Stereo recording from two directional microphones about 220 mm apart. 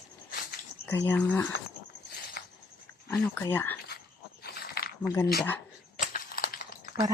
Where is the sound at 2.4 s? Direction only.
45° left (ahead or behind).